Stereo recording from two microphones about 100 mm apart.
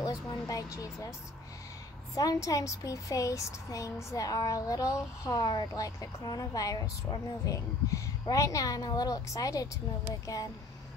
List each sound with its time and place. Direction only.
0.0 s speech: 40° left (ahead or behind)
2.1 s speech: 35° left (ahead or behind)